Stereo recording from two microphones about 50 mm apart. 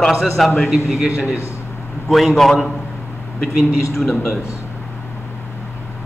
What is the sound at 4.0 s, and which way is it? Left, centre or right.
Speech, centre.